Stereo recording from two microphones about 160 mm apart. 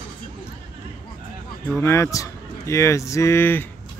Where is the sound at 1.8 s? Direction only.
15° left (ahead or behind).